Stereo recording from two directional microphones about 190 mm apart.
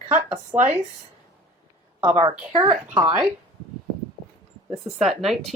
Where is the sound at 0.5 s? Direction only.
5° right (ahead or behind).